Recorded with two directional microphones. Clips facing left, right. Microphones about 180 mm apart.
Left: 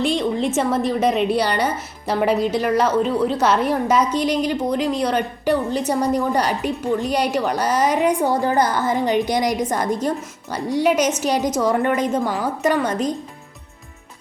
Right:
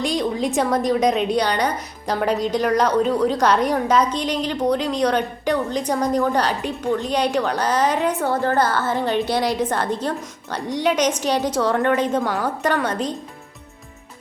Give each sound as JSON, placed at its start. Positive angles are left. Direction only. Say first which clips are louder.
{"t": 0.0, "sound": "a woman's voice", "louder": "left 2 dB", "side_deg": 0}